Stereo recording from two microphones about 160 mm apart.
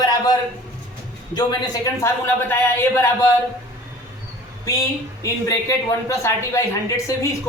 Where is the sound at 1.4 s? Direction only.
25° left (ahead or behind).